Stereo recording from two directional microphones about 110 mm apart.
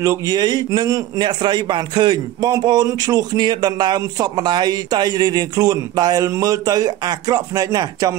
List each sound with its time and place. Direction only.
0.0 s a man's voice: 30° right (ahead or behind)